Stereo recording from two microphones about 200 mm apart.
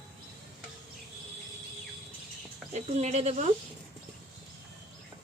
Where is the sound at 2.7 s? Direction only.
35° right (ahead or behind).